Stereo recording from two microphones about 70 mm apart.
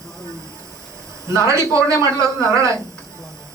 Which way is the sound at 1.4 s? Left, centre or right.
Right.